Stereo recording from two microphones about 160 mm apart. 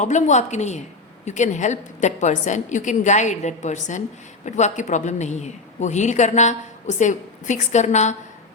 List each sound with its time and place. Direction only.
0.0 s a man's voice: 50° left (ahead or behind)